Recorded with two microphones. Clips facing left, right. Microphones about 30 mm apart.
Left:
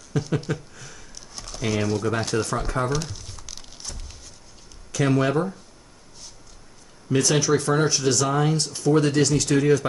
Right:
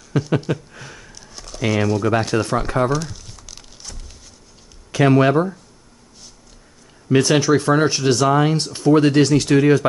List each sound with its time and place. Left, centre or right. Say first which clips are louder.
0.1 s speech: right 5 dB; right
0.5 s a sound: right 5 dB; right
1.3 s a sound: right 1 dB; centre
1.6 s speech: right 5 dB; centre
2.9 s crumpling: right 5 dB; centre
4.9 s speech: right 7 dB; right
7.1 s speech: right 5 dB; right